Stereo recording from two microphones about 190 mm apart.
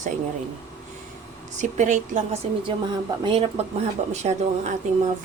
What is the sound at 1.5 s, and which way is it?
Speech, 40° right (ahead or behind).